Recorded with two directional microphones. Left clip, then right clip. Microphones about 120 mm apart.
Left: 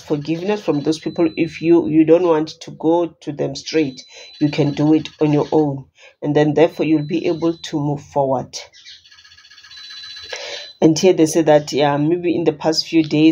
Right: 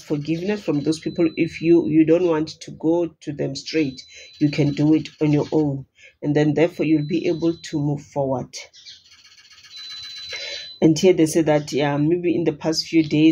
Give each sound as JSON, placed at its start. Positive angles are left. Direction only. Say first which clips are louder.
{"t": 0.1, "sound": "speech", "louder": "left 4 dB", "side_deg": -30}
{"t": 10.3, "sound": "speech", "louder": "left 3 dB", "side_deg": -25}